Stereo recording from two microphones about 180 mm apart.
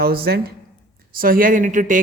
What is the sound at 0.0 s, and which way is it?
A woman's voice, 60° right (ahead or behind).